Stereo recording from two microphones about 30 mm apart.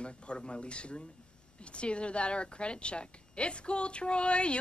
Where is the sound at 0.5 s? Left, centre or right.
Left.